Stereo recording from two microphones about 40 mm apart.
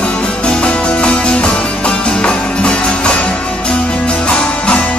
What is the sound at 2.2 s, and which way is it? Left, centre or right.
Music, left.